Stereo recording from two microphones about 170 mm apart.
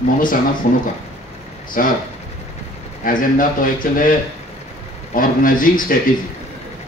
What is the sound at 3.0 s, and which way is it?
A man's voice, 55° left (ahead or behind).